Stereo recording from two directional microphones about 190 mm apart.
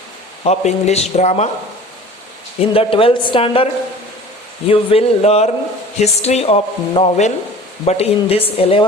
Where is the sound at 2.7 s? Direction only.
30° left (ahead or behind).